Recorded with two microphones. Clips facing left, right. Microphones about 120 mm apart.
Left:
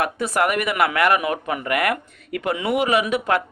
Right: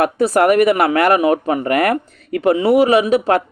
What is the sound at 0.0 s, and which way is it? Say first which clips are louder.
Speech: right 7 dB; 40° right (ahead or behind).